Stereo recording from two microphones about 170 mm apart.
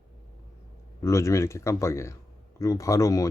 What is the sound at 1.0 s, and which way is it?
Speech, 15° left (ahead or behind).